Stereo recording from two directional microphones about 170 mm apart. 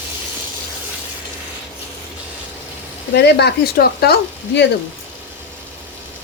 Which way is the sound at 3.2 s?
75° left (ahead or behind).